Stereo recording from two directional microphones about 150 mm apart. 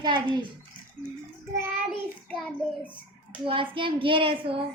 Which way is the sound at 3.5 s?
35° right (ahead or behind).